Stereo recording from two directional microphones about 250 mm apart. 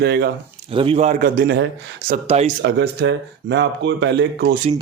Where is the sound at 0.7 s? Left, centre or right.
Right.